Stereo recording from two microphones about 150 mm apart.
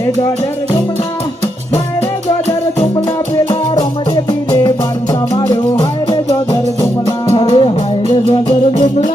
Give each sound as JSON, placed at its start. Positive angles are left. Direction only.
{"t": 3.3, "sound": "music", "side_deg": 30}
{"t": 5.3, "sound": "music", "side_deg": 20}
{"t": 8.1, "sound": "music", "side_deg": 35}